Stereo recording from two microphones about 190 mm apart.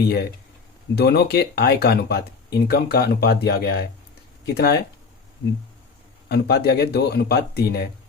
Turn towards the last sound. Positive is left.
turn(degrees=55)  # may be behind; listen again after turning